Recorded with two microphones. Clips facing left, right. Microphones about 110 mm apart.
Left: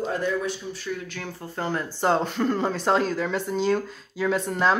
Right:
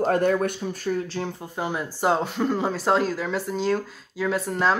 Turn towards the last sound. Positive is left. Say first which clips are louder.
# even
turn(degrees=0)  # may be behind; listen again after turning